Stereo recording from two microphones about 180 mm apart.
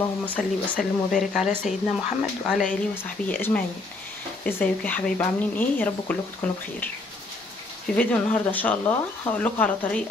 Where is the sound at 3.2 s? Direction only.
10° left (ahead or behind).